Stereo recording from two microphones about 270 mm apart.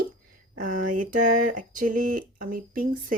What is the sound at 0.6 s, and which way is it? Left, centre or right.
Speech, right.